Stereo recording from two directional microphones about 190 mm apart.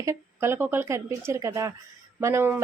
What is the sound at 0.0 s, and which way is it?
A woman's voice, 15° right (ahead or behind).